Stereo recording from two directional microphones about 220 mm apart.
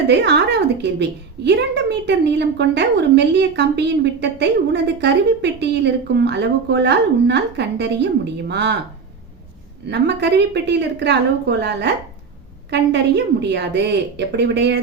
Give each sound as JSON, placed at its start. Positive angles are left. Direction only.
{"t": 0.1, "sound": "a woman's voice", "side_deg": -50}
{"t": 9.9, "sound": "a woman's voice", "side_deg": -50}